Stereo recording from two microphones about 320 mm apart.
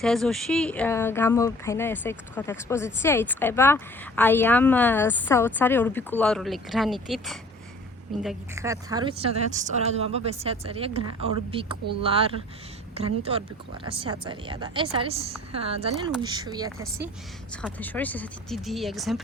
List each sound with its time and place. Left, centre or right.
0.0 s a woman's voice: centre
17.5 s speech: centre